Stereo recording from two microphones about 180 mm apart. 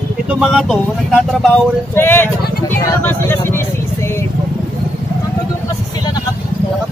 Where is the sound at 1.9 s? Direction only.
10° left (ahead or behind).